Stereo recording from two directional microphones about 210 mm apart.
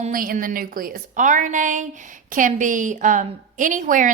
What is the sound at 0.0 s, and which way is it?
A woman's voice, 40° right (ahead or behind).